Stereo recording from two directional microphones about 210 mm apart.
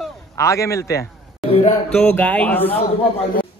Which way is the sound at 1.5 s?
35° left (ahead or behind).